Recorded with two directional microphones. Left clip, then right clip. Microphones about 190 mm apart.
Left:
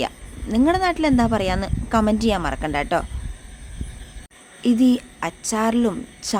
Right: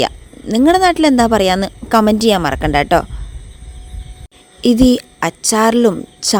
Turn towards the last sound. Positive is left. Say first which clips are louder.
# right 9 dB
turn(degrees=-40)  # may be behind; listen again after turning